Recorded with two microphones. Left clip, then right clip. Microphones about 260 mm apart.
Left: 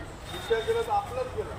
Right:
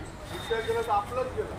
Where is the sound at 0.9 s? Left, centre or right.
Left.